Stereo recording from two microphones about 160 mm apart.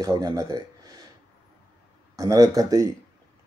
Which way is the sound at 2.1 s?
20° right (ahead or behind).